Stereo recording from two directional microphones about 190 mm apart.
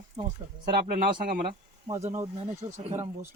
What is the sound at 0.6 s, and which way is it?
Speech, 50° right (ahead or behind).